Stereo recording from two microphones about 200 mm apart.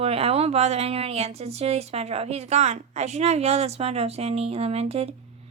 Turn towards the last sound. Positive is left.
turn(degrees=-30)  # may be behind; listen again after turning